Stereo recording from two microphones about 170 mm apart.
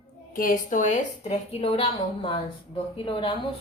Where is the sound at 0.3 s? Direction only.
55° left (ahead or behind); by 3.3 s 30° left (ahead or behind).